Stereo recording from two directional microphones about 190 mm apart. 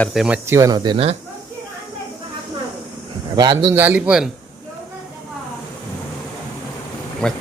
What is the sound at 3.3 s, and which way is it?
Speech, 25° right (ahead or behind).